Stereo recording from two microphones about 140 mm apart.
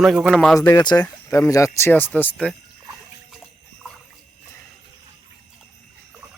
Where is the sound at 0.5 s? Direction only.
25° left (ahead or behind); by 2.5 s 10° left (ahead or behind).